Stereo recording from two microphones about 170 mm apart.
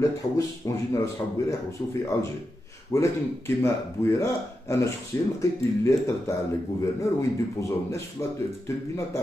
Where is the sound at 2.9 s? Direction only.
15° left (ahead or behind).